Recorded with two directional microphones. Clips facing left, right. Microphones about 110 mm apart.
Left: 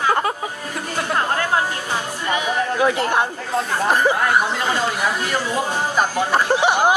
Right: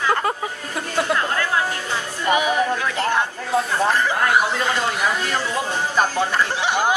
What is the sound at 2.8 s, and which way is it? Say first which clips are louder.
Speech: left 3 dB; 20° left (ahead or behind).